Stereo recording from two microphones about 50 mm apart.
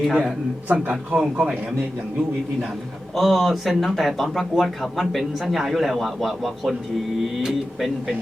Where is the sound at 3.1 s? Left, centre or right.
Centre.